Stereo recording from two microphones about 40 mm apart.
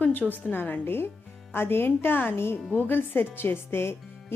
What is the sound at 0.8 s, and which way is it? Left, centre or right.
A woman's voice, left.